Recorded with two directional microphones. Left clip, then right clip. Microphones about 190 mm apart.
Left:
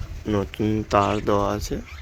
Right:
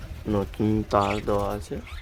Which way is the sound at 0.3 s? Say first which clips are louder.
Left 2 dB; centre (ahead or behind).